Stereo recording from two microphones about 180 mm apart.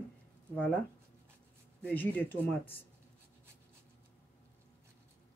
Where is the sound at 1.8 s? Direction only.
10° left (ahead or behind).